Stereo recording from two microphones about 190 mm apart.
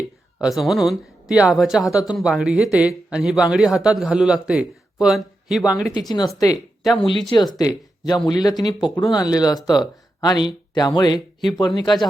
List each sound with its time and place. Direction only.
0.3 s a man's voice: centre (ahead or behind)
6.0 s speech: 20° left (ahead or behind)
6.8 s a man's voice: centre (ahead or behind)
7.3 s speech: 25° left (ahead or behind)